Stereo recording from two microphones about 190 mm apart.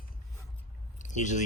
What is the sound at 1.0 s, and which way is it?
Speech, 40° left (ahead or behind).